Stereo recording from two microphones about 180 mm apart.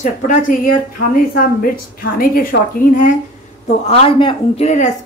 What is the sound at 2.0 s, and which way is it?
A woman's voice, 50° left (ahead or behind).